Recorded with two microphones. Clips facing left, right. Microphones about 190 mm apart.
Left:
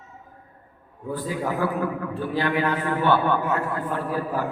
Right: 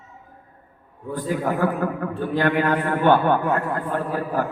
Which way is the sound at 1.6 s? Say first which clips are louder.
Right 2 dB; 45° right (ahead or behind).